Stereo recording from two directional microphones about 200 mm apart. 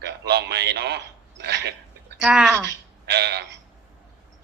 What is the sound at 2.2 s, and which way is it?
Speech, 5° right (ahead or behind).